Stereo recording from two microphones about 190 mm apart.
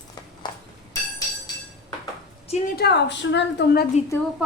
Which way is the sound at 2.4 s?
35° left (ahead or behind).